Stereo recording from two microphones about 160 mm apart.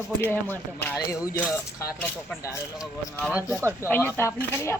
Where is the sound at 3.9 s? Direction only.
15° left (ahead or behind).